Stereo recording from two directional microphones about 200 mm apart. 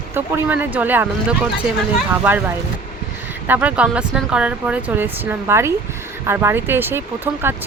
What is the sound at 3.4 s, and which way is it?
Speech, 10° right (ahead or behind).